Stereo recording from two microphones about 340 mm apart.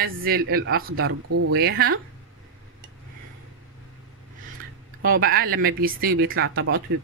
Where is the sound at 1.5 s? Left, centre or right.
Right.